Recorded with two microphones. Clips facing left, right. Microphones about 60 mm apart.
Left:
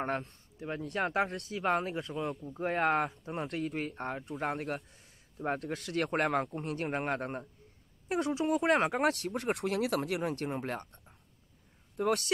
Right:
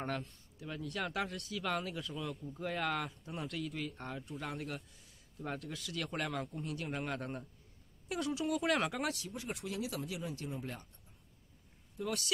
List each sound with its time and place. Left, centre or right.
0.6 s speech: left
9.1 s speech: left